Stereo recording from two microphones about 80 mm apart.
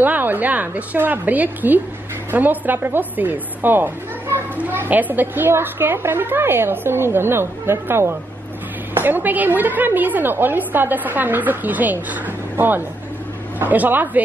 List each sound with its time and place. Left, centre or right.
0.0 s a woman's voice: right